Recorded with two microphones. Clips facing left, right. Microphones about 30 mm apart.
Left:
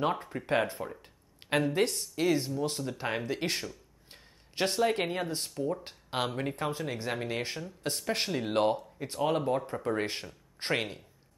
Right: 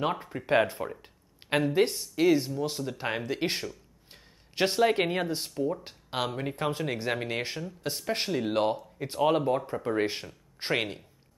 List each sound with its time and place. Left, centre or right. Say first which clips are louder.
0.0 s speech: even; centre
5.5 s speech: right 3 dB; centre
6.5 s speech: right 3 dB; right; by 8.7 s centre
8.9 s speech: right 4 dB; centre